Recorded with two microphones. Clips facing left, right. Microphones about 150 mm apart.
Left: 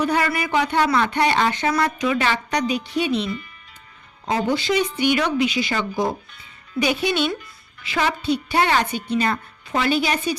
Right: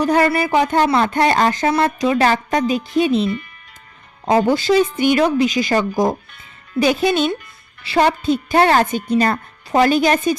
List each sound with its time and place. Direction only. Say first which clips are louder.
0.0 s a woman's voice: right 6 dB; 50° right (ahead or behind)
0.9 s a woman's voice: right 4 dB; 35° right (ahead or behind)
1.7 s a woman's voice: right 4 dB; 30° right (ahead or behind)
4.3 s a woman's voice: right 6 dB; 45° right (ahead or behind)